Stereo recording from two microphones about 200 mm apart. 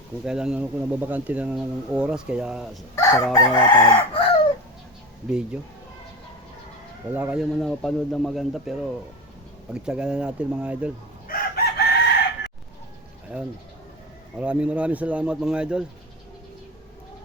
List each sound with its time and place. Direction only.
0.3 s speech: 5° right (ahead or behind)
2.9 s chicken: 15° left (ahead or behind)
5.3 s speech: 5° right (ahead or behind)
7.1 s speech: 10° right (ahead or behind)
11.3 s chicken: 55° left (ahead or behind)
13.3 s speech: 5° right (ahead or behind)